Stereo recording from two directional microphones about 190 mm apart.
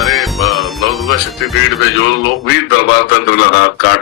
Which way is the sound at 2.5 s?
80° left.